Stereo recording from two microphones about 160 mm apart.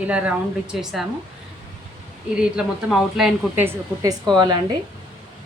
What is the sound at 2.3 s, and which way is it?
A woman's voice, 5° right (ahead or behind).